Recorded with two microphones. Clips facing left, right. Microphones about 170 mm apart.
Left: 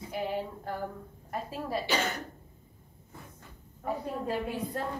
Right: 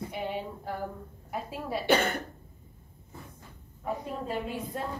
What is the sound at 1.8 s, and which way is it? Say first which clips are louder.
Speech: right 8 dB; 55° right (ahead or behind).